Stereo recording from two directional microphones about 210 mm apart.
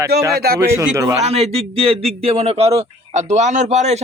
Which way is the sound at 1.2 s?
30° right (ahead or behind).